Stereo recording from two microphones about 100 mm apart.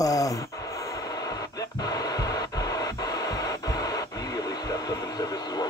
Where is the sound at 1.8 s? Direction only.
40° left (ahead or behind).